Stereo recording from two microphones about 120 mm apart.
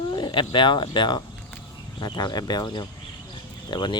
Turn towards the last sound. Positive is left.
turn(degrees=40)  # may be behind; listen again after turning